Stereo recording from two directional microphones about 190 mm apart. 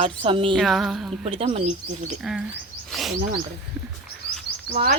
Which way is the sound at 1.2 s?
30° right (ahead or behind).